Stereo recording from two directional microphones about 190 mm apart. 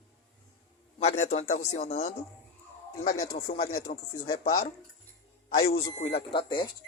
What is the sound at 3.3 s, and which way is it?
A man's voice, 30° left (ahead or behind).